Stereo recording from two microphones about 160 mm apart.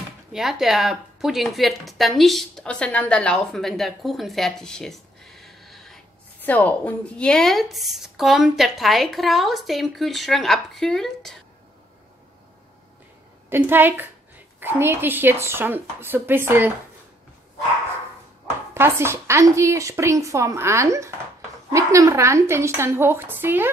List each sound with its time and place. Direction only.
0.3 s speech: centre (ahead or behind)
13.5 s a woman's voice: 15° right (ahead or behind)
18.7 s a woman's voice: 15° right (ahead or behind)